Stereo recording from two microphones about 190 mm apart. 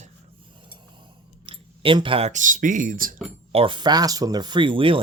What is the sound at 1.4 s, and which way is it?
Speech, 25° right (ahead or behind).